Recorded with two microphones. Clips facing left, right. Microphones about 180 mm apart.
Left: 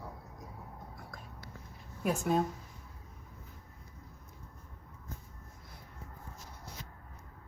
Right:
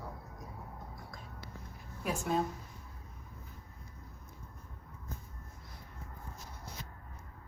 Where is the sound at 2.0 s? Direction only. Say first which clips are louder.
Left 4 dB; 45° left (ahead or behind).